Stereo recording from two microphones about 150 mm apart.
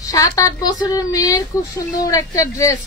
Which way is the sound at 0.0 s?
25° left (ahead or behind).